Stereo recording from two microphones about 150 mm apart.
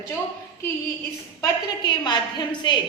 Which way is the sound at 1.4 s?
30° left (ahead or behind).